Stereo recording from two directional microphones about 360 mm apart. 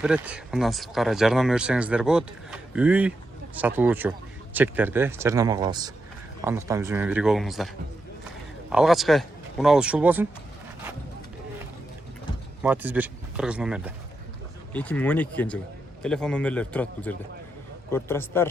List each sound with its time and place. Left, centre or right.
0.0 s speech: centre
8.7 s speech: centre
12.6 s a man's voice: centre